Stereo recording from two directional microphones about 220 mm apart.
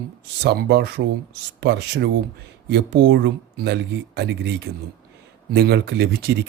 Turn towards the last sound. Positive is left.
turn(degrees=-45)  # may be behind; listen again after turning